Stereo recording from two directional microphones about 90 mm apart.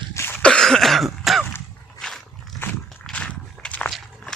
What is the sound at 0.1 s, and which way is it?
Cough, 30° left (ahead or behind).